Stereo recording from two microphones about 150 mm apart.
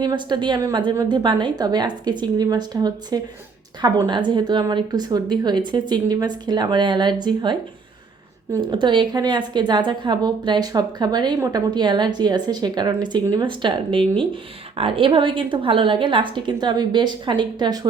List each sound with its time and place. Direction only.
0.0 s a woman's voice: 30° right (ahead or behind)
8.5 s a woman's voice: 30° right (ahead or behind)